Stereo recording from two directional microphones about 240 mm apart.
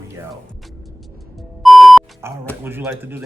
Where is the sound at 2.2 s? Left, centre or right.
Centre.